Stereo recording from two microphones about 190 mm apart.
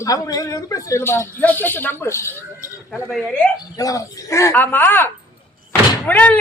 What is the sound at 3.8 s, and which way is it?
A woman's voice, 20° left (ahead or behind).